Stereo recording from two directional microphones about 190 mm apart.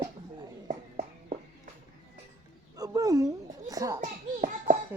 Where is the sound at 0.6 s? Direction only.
45° right (ahead or behind).